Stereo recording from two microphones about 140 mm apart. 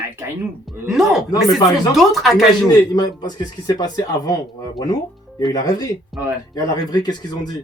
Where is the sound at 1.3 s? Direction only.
25° left (ahead or behind).